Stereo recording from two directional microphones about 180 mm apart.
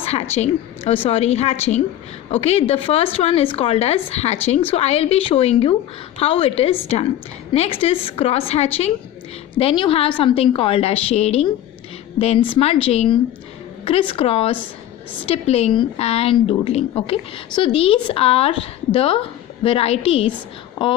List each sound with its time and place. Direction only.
0.0 s speech: 35° left (ahead or behind)